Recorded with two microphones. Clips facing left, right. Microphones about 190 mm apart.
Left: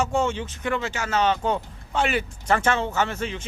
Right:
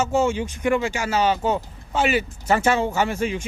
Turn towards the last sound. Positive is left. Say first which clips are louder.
# right 3 dB
turn(degrees=-10)  # may be behind; listen again after turning